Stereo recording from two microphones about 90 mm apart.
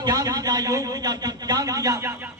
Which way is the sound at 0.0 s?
40° right (ahead or behind).